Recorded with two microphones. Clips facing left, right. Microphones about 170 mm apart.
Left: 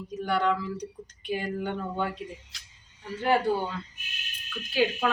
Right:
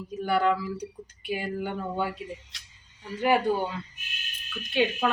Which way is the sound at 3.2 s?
15° right (ahead or behind).